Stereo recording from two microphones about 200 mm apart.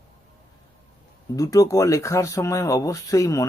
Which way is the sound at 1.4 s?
15° left (ahead or behind).